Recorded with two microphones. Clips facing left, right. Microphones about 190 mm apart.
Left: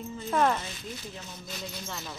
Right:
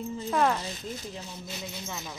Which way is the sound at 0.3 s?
Centre (ahead or behind).